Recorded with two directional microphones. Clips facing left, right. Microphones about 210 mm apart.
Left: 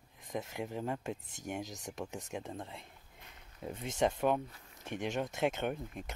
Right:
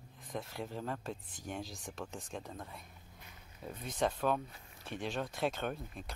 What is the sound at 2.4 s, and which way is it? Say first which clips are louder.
Speech: left 3 dB; 25° left (ahead or behind).